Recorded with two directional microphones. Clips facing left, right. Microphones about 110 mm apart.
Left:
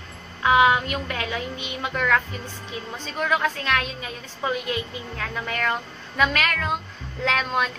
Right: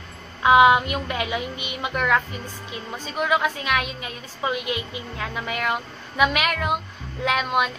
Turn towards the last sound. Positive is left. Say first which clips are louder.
# right 2 dB
turn(degrees=-10)  # may be behind; listen again after turning